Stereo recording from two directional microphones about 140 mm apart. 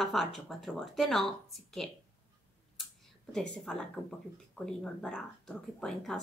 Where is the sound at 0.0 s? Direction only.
Centre (ahead or behind).